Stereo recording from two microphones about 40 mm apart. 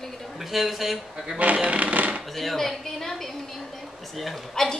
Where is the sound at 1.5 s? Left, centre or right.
Right.